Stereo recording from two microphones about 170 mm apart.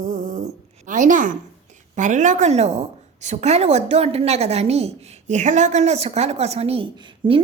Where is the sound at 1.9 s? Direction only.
45° right (ahead or behind).